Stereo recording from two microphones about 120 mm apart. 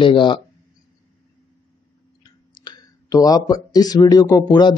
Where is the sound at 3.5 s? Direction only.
35° left (ahead or behind).